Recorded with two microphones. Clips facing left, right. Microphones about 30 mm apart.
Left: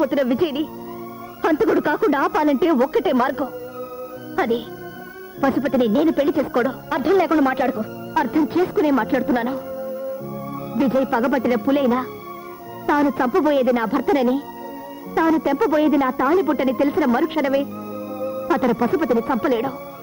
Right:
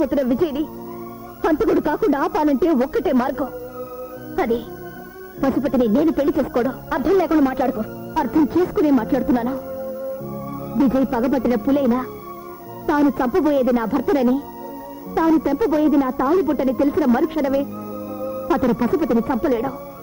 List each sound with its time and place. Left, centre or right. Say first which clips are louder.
0.0 s speech: even; left
10.7 s speech: right 1 dB; left
13.4 s speech: even; left
18.2 s music: even; left
18.9 s speech: even; left